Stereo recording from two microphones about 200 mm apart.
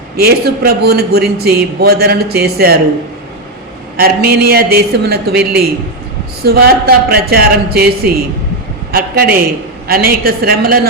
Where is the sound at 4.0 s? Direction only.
50° right (ahead or behind).